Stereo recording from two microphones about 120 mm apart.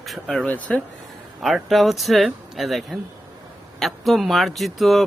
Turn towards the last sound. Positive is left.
turn(degrees=0)  # may be behind; listen again after turning